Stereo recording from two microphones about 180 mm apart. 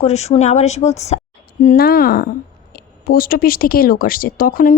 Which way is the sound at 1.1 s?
35° left (ahead or behind).